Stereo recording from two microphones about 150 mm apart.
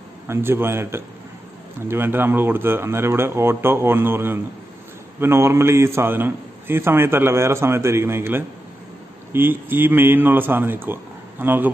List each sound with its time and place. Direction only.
0.3 s a man's voice: 15° right (ahead or behind)